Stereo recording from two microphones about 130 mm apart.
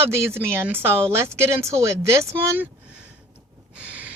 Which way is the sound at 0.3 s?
20° right (ahead or behind).